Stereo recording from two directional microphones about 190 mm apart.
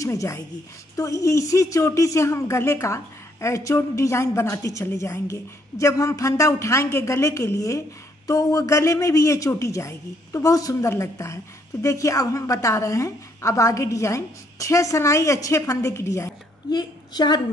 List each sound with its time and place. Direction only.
0.0 s a man's voice: 15° left (ahead or behind)